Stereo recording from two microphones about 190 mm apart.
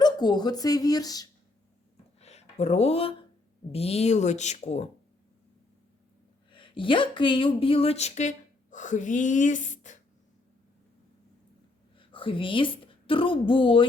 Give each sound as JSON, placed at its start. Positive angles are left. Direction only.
{"t": 0.0, "sound": "speech", "side_deg": 20}
{"t": 2.2, "sound": "speech", "side_deg": 35}
{"t": 6.5, "sound": "speech", "side_deg": 25}
{"t": 11.9, "sound": "a woman's voice", "side_deg": 25}